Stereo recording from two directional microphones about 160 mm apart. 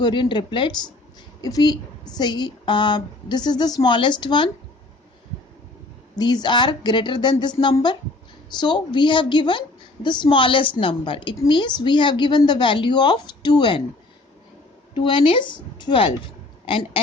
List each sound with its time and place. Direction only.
0.0 s a woman's voice: 30° left (ahead or behind)
6.1 s a woman's voice: 25° left (ahead or behind)
14.9 s a woman's voice: 30° left (ahead or behind)